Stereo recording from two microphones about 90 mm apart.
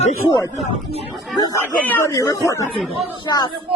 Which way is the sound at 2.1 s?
35° left (ahead or behind).